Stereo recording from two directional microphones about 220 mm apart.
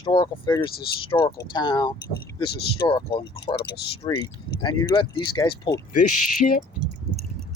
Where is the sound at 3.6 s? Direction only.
50° left (ahead or behind).